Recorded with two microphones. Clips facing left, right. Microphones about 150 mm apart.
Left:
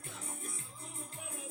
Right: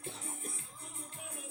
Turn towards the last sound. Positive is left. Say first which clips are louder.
# right 2 dB
turn(degrees=-30)  # may be behind; listen again after turning